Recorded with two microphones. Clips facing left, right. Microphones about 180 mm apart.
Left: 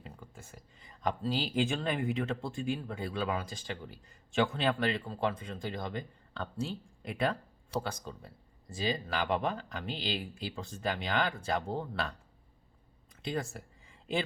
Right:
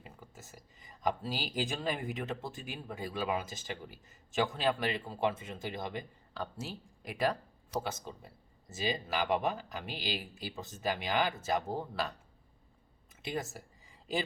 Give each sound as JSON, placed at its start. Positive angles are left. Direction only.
{"t": 0.0, "sound": "speech", "side_deg": -5}
{"t": 7.9, "sound": "speech", "side_deg": -15}
{"t": 8.7, "sound": "speech", "side_deg": -5}
{"t": 13.2, "sound": "speech", "side_deg": -5}